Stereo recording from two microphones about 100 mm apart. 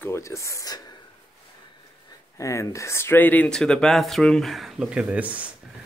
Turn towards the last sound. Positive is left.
turn(degrees=-15)  # may be behind; listen again after turning